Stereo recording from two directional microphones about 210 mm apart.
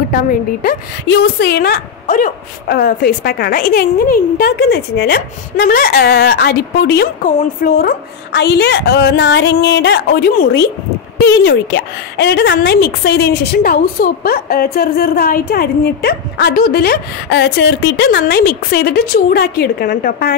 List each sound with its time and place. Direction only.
0.1 s a woman's voice: 45° left (ahead or behind)